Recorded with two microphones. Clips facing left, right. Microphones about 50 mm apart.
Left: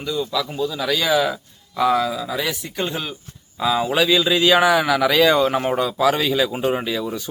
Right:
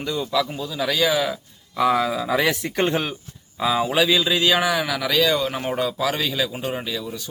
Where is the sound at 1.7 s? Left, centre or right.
Centre.